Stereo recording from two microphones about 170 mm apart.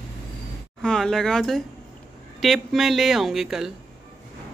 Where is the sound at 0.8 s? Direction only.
5° left (ahead or behind).